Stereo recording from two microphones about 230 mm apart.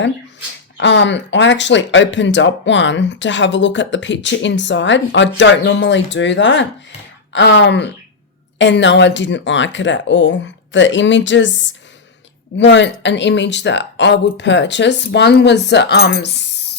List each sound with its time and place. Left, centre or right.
0.8 s speech: left
12.5 s speech: left